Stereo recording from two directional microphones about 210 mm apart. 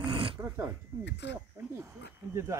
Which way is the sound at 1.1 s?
55° left (ahead or behind).